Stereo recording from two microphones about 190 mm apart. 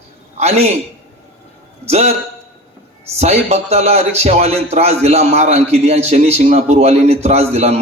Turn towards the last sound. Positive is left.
turn(degrees=-35)  # may be behind; listen again after turning